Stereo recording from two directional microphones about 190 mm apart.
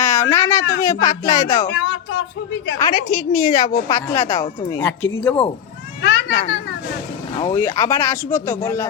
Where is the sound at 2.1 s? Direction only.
70° left (ahead or behind).